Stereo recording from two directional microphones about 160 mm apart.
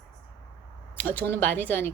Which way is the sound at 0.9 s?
10° left (ahead or behind).